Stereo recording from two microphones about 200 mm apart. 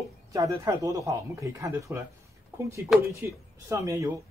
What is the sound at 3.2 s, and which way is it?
Speech, 15° right (ahead or behind).